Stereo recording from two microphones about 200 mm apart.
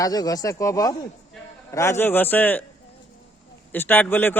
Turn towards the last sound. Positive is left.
turn(degrees=10)  # may be behind; listen again after turning